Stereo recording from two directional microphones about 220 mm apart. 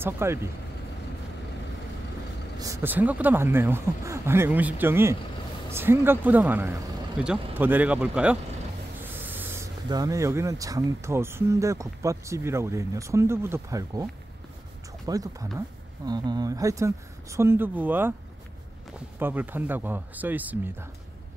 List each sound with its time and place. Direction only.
0.0 s speech: 10° right (ahead or behind)
2.6 s speech: 10° right (ahead or behind)
15.0 s speech: 15° right (ahead or behind)
19.1 s speech: 10° right (ahead or behind)